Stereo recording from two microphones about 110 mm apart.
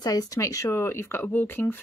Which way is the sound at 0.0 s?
35° left (ahead or behind).